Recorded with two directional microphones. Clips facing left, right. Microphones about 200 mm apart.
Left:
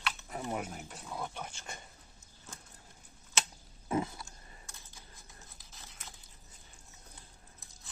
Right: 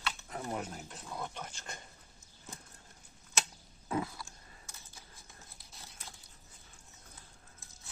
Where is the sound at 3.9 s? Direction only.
20° left (ahead or behind).